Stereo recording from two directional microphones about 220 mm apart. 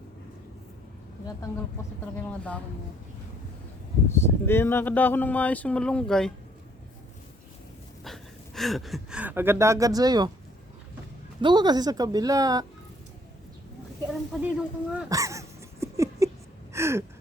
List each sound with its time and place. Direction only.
4.1 s speech: 10° left (ahead or behind)
8.0 s speech: centre (ahead or behind); by 10.3 s 20° right (ahead or behind)
11.3 s speech: 20° right (ahead or behind)
14.1 s speech: 5° right (ahead or behind)
16.7 s gasp: 10° right (ahead or behind)